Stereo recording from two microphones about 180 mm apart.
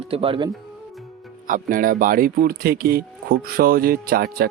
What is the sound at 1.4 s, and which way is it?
Speech, 50° right (ahead or behind).